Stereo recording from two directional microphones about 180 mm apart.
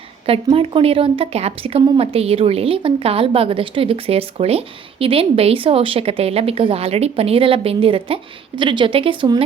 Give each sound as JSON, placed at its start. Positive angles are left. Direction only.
{"t": 0.3, "sound": "a woman's voice", "side_deg": -30}